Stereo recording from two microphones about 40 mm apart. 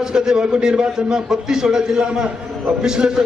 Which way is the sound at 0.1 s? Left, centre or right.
Centre.